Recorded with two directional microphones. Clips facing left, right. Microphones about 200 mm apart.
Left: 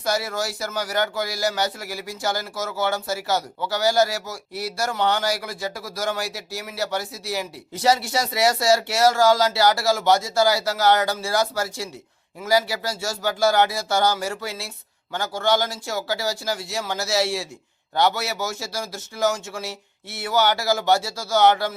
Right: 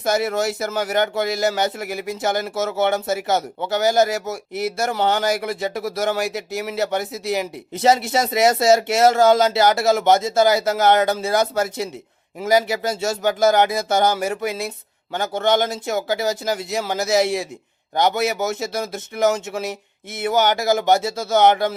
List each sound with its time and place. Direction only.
0.0 s speech: 20° right (ahead or behind)